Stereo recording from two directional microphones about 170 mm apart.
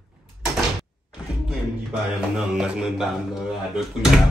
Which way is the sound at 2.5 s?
5° right (ahead or behind).